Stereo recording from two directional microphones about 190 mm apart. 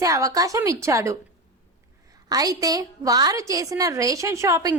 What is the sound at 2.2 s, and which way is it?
A woman's voice, 20° right (ahead or behind).